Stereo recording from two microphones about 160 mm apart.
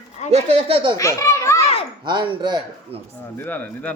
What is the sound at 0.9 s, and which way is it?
Speech, 20° left (ahead or behind).